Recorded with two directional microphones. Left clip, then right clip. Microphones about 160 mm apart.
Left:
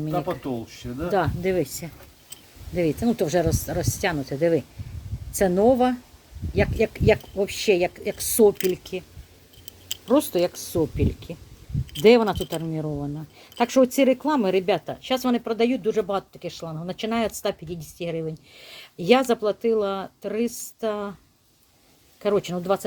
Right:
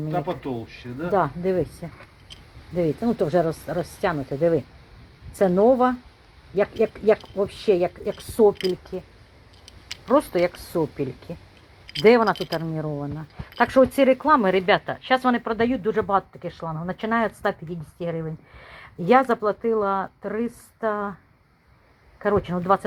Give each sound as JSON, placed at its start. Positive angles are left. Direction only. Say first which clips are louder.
{"t": 0.0, "sound": "speech", "louder": "even", "side_deg": 20}
{"t": 8.4, "sound": "speech", "louder": "even", "side_deg": 25}
{"t": 10.1, "sound": "speech", "louder": "right 1 dB", "side_deg": 15}
{"t": 22.2, "sound": "speech", "louder": "right 1 dB", "side_deg": 10}